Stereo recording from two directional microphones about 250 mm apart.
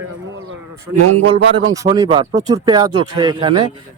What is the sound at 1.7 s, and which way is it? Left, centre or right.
Speech, centre.